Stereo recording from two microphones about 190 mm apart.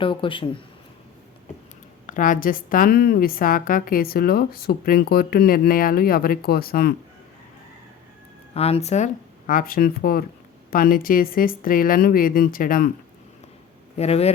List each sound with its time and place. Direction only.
0.0 s speech: 25° left (ahead or behind)
2.0 s a woman's voice: 45° left (ahead or behind)
8.5 s speech: 35° left (ahead or behind)
9.5 s a woman's voice: 45° left (ahead or behind)
13.9 s a man's voice: 35° left (ahead or behind)